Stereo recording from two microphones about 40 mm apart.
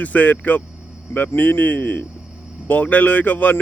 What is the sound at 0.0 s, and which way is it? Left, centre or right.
A man's voice, left.